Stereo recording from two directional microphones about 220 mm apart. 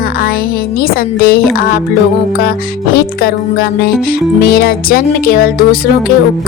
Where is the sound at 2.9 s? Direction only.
40° left (ahead or behind).